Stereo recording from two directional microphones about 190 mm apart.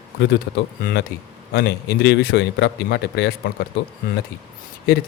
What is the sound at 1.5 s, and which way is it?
A man's voice, 60° left (ahead or behind).